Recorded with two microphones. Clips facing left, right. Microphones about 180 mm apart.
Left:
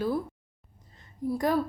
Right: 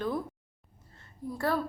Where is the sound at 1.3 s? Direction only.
15° left (ahead or behind).